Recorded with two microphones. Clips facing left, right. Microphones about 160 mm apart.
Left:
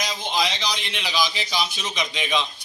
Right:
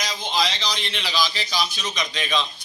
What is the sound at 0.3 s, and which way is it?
A man's voice, 15° left (ahead or behind).